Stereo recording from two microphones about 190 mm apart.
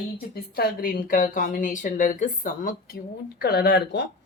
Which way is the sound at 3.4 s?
60° left (ahead or behind).